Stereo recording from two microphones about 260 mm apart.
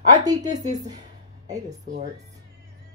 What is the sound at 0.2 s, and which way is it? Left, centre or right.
Speech, centre.